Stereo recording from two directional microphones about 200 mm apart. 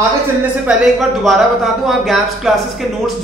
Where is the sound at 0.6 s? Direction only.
Centre (ahead or behind).